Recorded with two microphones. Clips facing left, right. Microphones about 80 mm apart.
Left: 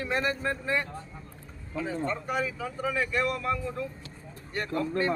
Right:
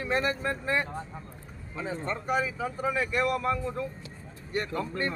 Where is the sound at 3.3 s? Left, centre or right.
Right.